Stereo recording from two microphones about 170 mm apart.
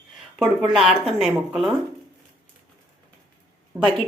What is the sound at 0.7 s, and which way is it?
A woman's voice, centre (ahead or behind).